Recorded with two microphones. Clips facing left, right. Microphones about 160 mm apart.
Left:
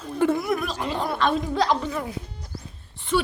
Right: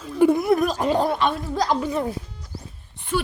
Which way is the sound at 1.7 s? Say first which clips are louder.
Right 1 dB; 15° right (ahead or behind).